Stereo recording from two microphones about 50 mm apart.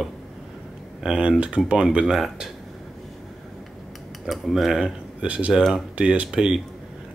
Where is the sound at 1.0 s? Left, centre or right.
Centre.